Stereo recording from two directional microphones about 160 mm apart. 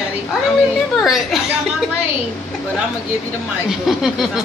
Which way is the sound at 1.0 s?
Centre (ahead or behind).